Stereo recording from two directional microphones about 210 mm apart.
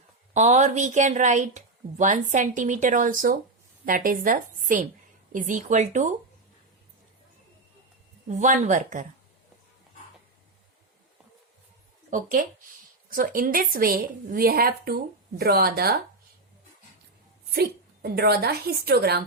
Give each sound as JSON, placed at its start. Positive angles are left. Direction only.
{"t": 0.3, "sound": "a woman's voice", "side_deg": -35}
{"t": 8.3, "sound": "a woman's voice", "side_deg": -35}
{"t": 12.1, "sound": "a woman's voice", "side_deg": -40}
{"t": 17.5, "sound": "a woman's voice", "side_deg": -45}